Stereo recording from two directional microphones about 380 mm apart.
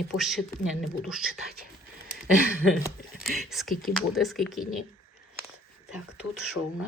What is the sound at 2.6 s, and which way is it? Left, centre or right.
Speech, centre.